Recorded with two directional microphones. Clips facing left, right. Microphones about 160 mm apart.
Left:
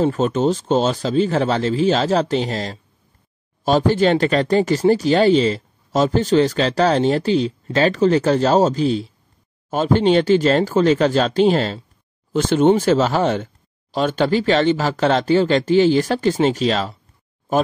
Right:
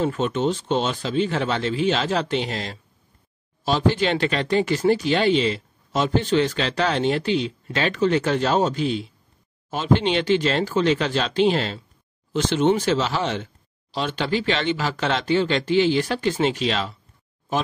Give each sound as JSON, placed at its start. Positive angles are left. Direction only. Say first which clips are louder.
{"t": 0.0, "sound": "speech", "louder": "left 5 dB", "side_deg": 40}